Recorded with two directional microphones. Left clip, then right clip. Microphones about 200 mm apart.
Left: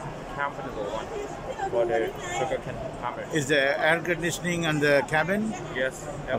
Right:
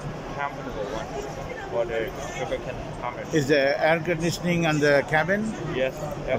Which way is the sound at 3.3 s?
Centre (ahead or behind).